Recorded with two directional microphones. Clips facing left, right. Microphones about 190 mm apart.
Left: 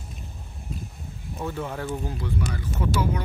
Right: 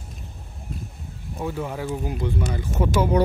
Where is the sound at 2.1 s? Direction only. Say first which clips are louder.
Right 3 dB; 25° right (ahead or behind).